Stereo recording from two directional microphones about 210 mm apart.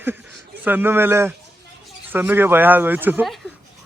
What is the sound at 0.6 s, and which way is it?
Speech, 10° right (ahead or behind).